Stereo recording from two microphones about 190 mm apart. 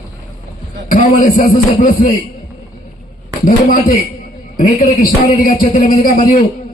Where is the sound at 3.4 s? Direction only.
45° left (ahead or behind).